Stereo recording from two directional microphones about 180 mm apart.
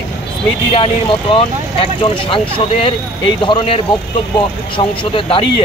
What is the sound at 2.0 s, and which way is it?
A man's voice, 30° left (ahead or behind).